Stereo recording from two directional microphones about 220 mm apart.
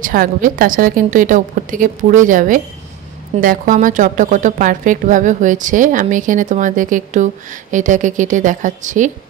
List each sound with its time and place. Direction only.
0.0 s a woman's voice: 40° right (ahead or behind)